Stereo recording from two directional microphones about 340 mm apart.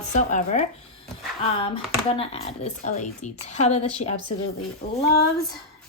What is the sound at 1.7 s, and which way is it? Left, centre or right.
Speech, centre.